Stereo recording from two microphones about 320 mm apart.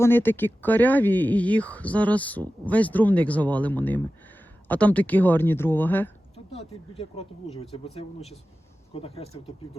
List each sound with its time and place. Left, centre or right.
0.0 s speech: centre
6.3 s speech: centre